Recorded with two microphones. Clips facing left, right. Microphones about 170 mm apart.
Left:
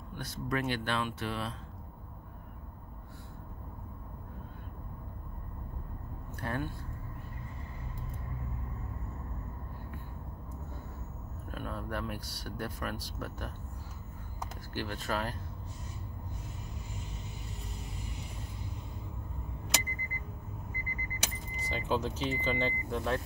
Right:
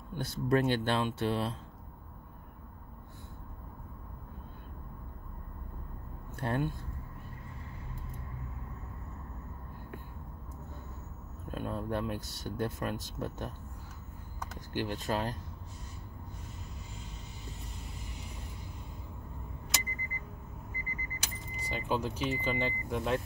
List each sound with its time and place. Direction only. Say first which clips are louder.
0.1 s speech: right 6 dB; 25° right (ahead or behind)
6.4 s speech: right 4 dB; 25° right (ahead or behind)
11.5 s speech: right 4 dB; 25° right (ahead or behind)
14.7 s speech: right 3 dB; 20° right (ahead or behind)
21.5 s speech: left 1 dB; 10° right (ahead or behind)